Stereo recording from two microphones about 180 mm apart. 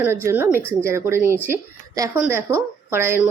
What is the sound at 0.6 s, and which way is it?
Speech, 10° left (ahead or behind).